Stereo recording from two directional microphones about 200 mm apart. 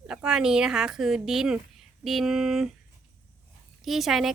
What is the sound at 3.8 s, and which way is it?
Speech, centre (ahead or behind).